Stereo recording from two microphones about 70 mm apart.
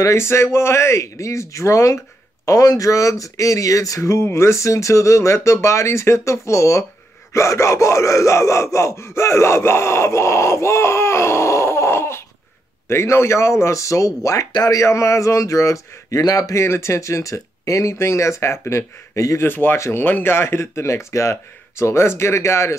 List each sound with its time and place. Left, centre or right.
0.0 s speech: left
14.5 s speech: left
14.8 s speech: left
16.5 s speech: left
19.4 s speech: left